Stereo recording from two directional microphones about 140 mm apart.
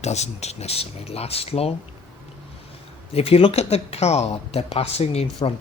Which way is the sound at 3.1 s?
45° left (ahead or behind).